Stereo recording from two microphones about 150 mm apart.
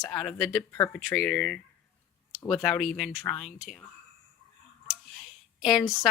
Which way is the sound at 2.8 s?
Centre (ahead or behind).